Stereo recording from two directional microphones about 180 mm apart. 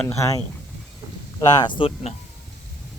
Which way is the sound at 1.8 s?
30° left (ahead or behind).